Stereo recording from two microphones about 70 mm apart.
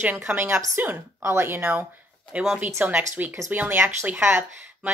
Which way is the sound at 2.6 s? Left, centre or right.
Right.